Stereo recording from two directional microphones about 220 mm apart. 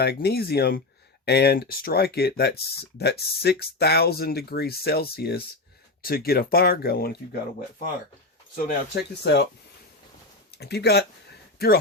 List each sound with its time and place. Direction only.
0.0 s speech: 45° left (ahead or behind)
8.5 s speech: 45° left (ahead or behind)
10.6 s speech: 45° left (ahead or behind)